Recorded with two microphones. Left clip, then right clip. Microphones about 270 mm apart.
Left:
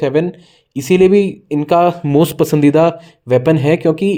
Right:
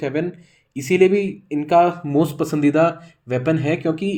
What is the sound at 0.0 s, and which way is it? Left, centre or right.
A man's voice, left.